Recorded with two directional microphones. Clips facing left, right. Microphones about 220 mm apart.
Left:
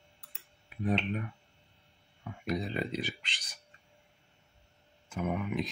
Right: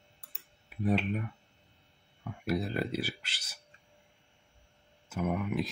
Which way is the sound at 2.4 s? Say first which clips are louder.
Right 2 dB; 5° right (ahead or behind).